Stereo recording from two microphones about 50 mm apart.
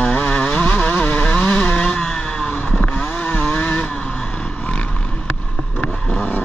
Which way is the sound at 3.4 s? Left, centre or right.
Left.